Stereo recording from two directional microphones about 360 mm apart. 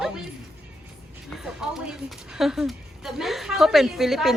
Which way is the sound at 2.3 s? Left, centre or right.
Centre.